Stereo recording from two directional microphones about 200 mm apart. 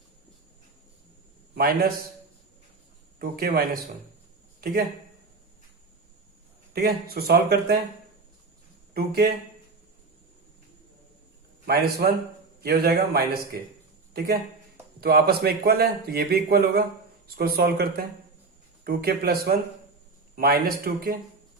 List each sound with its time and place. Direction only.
1.5 s a man's voice: 45° right (ahead or behind)
3.2 s a man's voice: 50° right (ahead or behind)
6.7 s a man's voice: 50° right (ahead or behind)
8.9 s speech: 50° right (ahead or behind)
11.6 s a man's voice: 50° right (ahead or behind)